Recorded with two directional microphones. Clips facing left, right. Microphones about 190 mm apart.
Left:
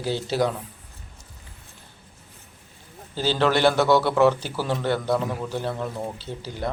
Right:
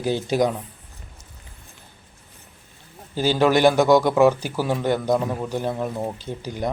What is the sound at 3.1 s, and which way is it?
A man's voice, 15° right (ahead or behind).